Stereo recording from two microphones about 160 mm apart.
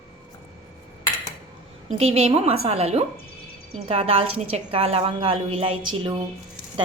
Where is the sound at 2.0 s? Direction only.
35° right (ahead or behind).